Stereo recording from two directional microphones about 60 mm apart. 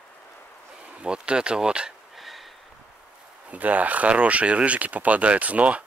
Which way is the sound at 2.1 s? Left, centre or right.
Centre.